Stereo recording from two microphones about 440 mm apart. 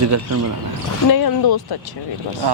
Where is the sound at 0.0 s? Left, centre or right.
Right.